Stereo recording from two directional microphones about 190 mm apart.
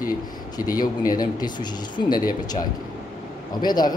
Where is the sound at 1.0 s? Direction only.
20° left (ahead or behind).